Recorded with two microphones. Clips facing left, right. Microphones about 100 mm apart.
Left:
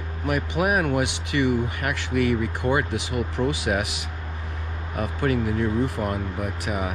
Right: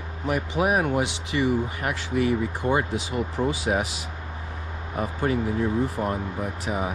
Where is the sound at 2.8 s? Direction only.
70° left (ahead or behind).